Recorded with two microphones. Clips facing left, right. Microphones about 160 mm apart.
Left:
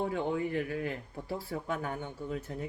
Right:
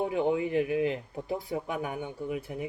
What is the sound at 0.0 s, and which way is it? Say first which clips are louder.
Speech: right 4 dB; 15° right (ahead or behind).